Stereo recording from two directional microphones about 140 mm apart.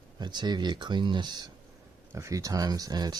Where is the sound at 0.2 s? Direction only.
30° right (ahead or behind).